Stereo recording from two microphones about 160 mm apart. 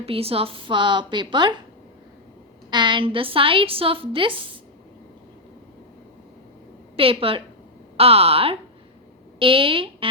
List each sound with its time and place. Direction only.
0.0 s a woman's voice: 35° right (ahead or behind)
2.6 s a woman's voice: 30° right (ahead or behind)
6.9 s a woman's voice: 35° right (ahead or behind)